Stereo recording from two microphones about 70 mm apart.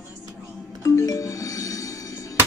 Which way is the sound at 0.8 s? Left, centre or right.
Left.